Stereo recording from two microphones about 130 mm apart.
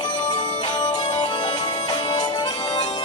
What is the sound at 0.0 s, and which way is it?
Music, 35° left (ahead or behind).